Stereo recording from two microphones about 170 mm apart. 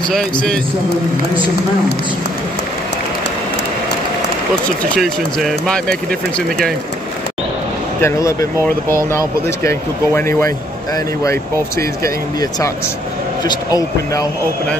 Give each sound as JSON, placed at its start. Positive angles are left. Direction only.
{"t": 0.1, "sound": "speech", "side_deg": 5}
{"t": 4.9, "sound": "speech", "side_deg": 0}
{"t": 8.0, "sound": "speech", "side_deg": 15}
{"t": 12.0, "sound": "speech", "side_deg": 20}